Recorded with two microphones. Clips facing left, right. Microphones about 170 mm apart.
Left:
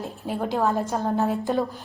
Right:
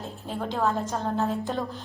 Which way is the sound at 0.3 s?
15° left (ahead or behind).